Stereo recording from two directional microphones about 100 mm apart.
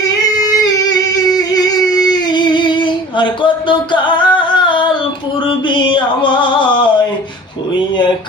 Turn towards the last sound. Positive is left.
turn(degrees=55)  # may be behind; listen again after turning